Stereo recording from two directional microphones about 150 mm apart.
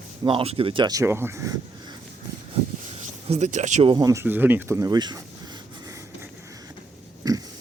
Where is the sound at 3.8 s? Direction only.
25° right (ahead or behind).